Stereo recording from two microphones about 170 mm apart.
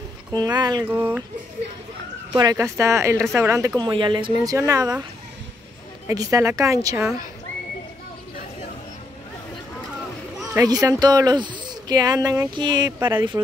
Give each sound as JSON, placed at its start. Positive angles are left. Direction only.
{"t": 0.3, "sound": "speech", "side_deg": -25}
{"t": 0.8, "sound": "speech", "side_deg": -10}
{"t": 2.3, "sound": "speech", "side_deg": -20}
{"t": 6.0, "sound": "speech", "side_deg": -20}
{"t": 10.6, "sound": "speech", "side_deg": -20}